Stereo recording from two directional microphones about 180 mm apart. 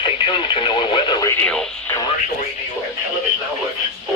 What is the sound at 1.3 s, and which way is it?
Speech, 5° left (ahead or behind).